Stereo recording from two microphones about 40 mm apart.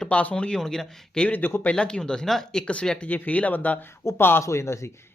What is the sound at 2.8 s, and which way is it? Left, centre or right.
Speech, left.